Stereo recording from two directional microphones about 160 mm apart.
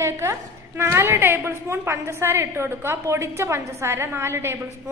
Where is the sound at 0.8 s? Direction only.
15° right (ahead or behind).